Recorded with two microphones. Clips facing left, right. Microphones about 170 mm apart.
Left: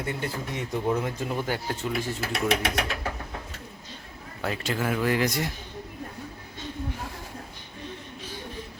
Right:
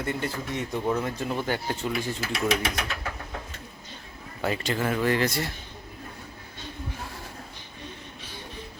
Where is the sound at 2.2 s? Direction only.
60° left (ahead or behind).